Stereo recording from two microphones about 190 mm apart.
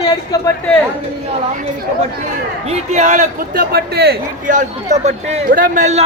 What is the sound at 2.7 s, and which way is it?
A man's voice, 40° right (ahead or behind).